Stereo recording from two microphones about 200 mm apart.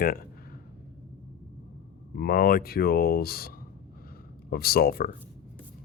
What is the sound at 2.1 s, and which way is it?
Speech, 50° left (ahead or behind).